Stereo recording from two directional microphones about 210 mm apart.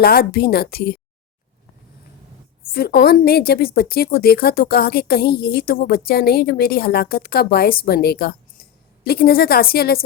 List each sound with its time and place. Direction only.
0.0 s a woman's voice: 45° left (ahead or behind)
2.6 s a woman's voice: 45° left (ahead or behind)